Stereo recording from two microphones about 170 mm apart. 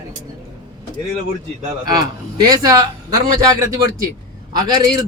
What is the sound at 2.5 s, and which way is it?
Speech, 20° right (ahead or behind).